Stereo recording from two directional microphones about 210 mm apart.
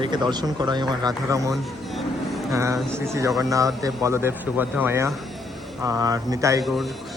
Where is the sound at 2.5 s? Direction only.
15° right (ahead or behind).